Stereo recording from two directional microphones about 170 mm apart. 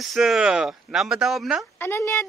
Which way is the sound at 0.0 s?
Centre (ahead or behind).